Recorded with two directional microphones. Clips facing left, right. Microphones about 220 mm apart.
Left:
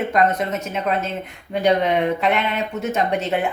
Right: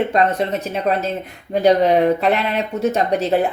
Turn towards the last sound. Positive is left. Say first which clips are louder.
# right 4 dB
turn(degrees=-35)  # may be behind; listen again after turning